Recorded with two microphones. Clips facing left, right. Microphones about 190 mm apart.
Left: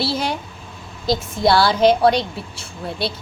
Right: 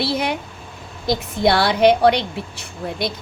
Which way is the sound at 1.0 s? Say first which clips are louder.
Even; 20° right (ahead or behind).